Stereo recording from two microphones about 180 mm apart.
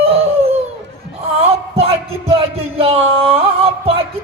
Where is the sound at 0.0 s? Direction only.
35° right (ahead or behind).